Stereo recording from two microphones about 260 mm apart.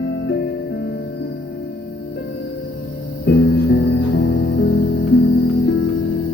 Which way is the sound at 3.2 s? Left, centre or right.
Left.